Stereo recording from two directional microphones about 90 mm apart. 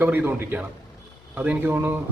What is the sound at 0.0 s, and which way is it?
A man's voice, 25° right (ahead or behind).